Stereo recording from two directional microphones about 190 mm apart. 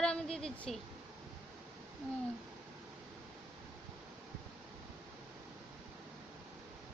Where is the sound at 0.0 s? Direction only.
5° left (ahead or behind).